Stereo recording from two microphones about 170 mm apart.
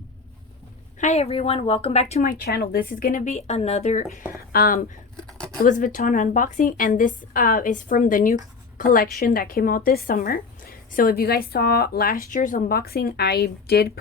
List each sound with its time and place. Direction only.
0.9 s a woman's voice: 45° left (ahead or behind)
2.4 s a woman's voice: 65° left (ahead or behind); by 4.2 s 45° left (ahead or behind)
4.4 s a woman's voice: 60° left (ahead or behind)